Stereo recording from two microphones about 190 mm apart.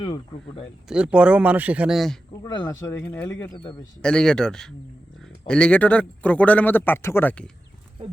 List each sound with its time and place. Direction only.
0.0 s speech: 25° left (ahead or behind)
0.9 s speech: 5° right (ahead or behind)
2.4 s a man's voice: 20° left (ahead or behind)